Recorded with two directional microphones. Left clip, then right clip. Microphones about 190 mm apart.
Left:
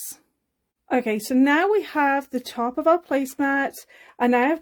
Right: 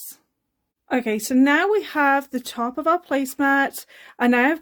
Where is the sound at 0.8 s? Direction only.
Centre (ahead or behind).